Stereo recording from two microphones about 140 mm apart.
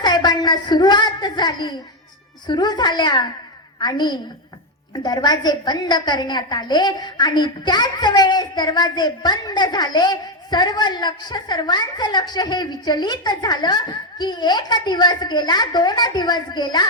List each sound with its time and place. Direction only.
0.0 s a woman's voice: 30° left (ahead or behind)